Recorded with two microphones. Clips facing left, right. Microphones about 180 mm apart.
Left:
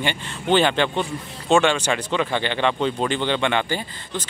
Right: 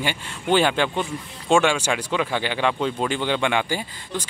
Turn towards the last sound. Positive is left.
turn(degrees=-10)  # may be behind; listen again after turning